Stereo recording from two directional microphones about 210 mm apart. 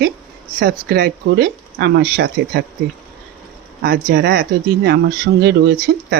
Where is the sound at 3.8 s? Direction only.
50° right (ahead or behind).